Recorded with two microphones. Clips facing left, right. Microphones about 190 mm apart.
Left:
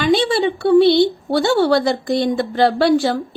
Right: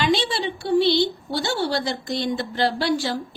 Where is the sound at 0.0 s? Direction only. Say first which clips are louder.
Left 7 dB; 55° left (ahead or behind).